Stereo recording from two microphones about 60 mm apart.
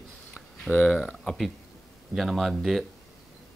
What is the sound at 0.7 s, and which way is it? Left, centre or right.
Speech, left.